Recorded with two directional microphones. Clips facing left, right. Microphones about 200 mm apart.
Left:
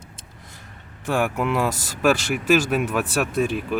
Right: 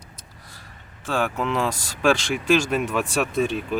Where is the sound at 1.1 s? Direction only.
15° left (ahead or behind).